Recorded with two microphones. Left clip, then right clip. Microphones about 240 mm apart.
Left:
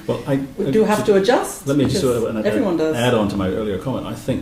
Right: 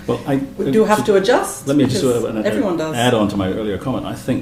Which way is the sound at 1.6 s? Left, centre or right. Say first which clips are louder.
Right 1 dB; centre.